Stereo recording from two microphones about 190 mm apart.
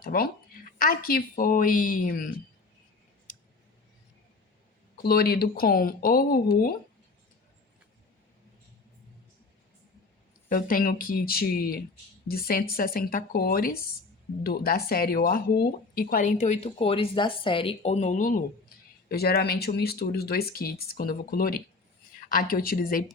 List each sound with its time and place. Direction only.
0.0 s speech: 50° left (ahead or behind)
5.0 s speech: 50° left (ahead or behind)
10.5 s speech: 50° left (ahead or behind)
19.0 s speech: 55° left (ahead or behind)